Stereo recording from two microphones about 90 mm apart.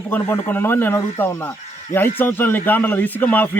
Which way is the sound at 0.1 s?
20° left (ahead or behind).